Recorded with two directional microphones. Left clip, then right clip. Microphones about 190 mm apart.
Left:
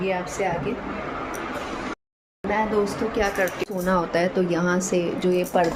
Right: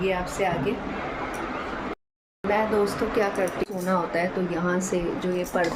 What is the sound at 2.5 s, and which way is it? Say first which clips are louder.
Speech: even; centre (ahead or behind).